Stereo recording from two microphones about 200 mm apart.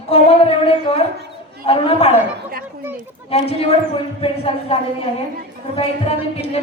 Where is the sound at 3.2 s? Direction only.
30° left (ahead or behind).